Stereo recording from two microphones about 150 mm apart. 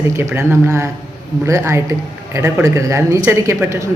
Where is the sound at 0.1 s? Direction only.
20° right (ahead or behind).